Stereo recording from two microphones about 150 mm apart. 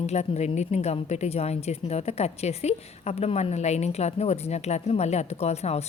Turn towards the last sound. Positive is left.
turn(degrees=45)  # may be behind; listen again after turning